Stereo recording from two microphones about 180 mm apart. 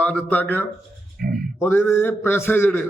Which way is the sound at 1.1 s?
55° right (ahead or behind).